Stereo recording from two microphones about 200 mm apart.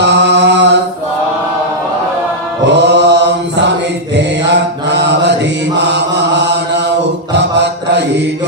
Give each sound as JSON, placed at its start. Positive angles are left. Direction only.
{"t": 0.0, "sound": "mantra", "side_deg": -60}
{"t": 2.6, "sound": "mantra", "side_deg": -60}
{"t": 4.8, "sound": "mantra", "side_deg": -60}